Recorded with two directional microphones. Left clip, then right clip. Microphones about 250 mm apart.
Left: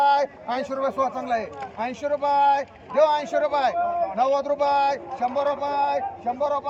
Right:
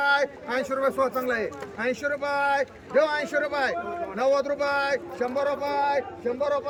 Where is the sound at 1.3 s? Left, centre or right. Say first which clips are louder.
Left 2 dB; centre.